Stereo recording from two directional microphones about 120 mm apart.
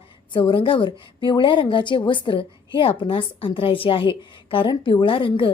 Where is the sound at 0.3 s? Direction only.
45° left (ahead or behind).